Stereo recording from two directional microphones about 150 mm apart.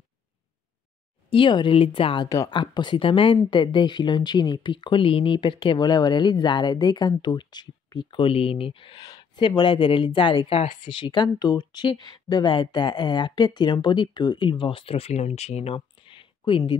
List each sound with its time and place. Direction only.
1.3 s speech: 35° left (ahead or behind)
2.2 s speech: 20° left (ahead or behind)